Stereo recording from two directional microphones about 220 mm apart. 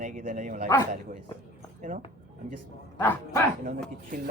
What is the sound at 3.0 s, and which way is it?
Speech, 10° left (ahead or behind).